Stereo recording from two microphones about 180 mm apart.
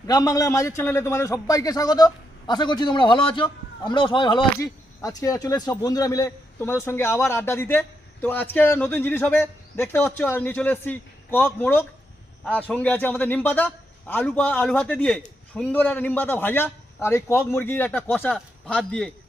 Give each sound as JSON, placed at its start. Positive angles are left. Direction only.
{"t": 0.1, "sound": "a man's voice", "side_deg": 20}